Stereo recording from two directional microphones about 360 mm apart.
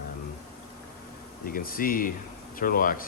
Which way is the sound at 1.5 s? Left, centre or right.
Left.